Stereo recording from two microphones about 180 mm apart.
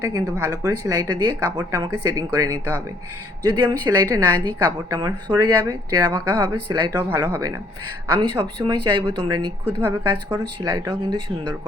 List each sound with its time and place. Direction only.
0.0 s a woman's voice: 15° right (ahead or behind)